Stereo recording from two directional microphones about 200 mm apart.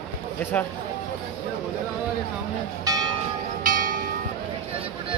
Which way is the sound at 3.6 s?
45° right (ahead or behind).